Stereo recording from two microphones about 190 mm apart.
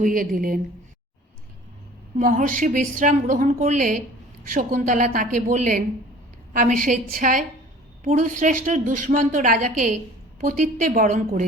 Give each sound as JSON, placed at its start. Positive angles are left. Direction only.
{"t": 0.0, "sound": "a woman's voice", "side_deg": -45}
{"t": 2.1, "sound": "a woman's voice", "side_deg": -40}